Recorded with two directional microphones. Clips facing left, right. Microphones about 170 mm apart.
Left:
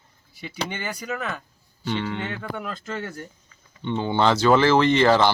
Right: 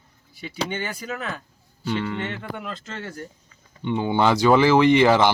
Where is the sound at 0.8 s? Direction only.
Centre (ahead or behind).